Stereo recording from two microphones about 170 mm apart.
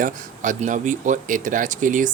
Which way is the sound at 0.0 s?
50° right (ahead or behind).